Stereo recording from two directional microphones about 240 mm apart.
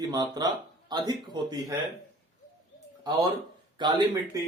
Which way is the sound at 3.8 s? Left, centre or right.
Centre.